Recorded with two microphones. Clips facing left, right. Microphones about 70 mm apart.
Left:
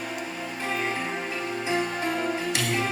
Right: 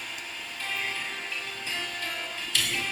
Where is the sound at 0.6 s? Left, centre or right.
Left.